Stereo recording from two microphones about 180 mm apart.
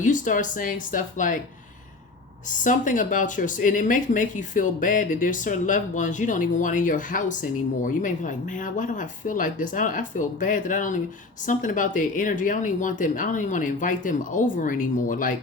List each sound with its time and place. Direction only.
0.0 s speech: 45° left (ahead or behind)
2.6 s speech: 45° left (ahead or behind)